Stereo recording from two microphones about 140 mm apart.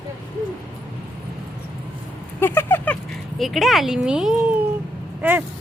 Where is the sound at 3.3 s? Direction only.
Centre (ahead or behind).